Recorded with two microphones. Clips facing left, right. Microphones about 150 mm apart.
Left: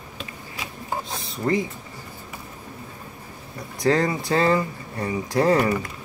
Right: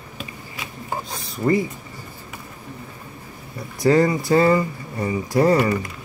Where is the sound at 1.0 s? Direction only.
Centre (ahead or behind).